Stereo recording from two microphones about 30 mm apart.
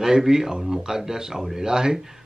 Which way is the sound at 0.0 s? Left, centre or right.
Centre.